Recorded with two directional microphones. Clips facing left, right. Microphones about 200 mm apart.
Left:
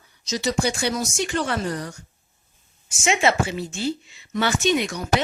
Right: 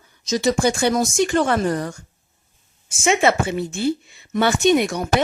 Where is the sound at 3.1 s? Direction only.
55° right (ahead or behind).